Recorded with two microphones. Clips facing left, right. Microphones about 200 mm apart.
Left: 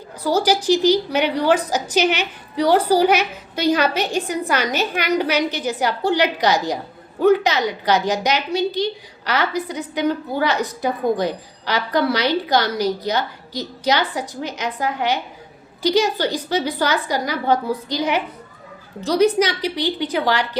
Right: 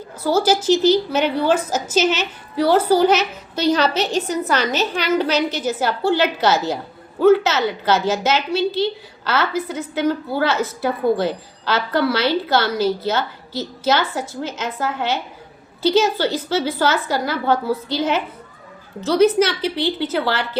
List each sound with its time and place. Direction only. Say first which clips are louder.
0.2 s a woman's voice: right 1 dB; 15° left (ahead or behind)